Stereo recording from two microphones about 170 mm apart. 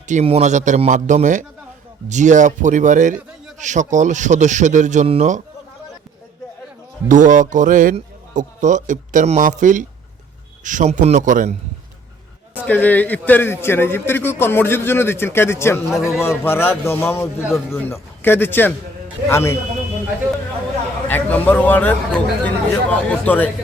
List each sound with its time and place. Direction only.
0.1 s a man's voice: 40° right (ahead or behind)
7.1 s a man's voice: 50° right (ahead or behind)
12.6 s a man's voice: 10° left (ahead or behind)
15.9 s speech: 5° right (ahead or behind)
16.2 s a man's voice: 15° left (ahead or behind)
17.4 s speech: centre (ahead or behind)
17.8 s a man's voice: 15° left (ahead or behind)
21.1 s a man's voice: 10° left (ahead or behind)